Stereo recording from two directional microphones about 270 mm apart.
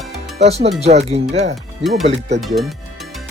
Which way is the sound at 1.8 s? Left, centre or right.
Centre.